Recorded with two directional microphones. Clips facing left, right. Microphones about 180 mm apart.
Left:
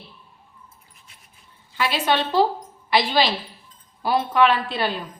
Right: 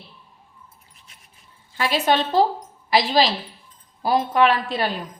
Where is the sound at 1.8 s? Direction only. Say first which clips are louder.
Right 2 dB; 45° right (ahead or behind).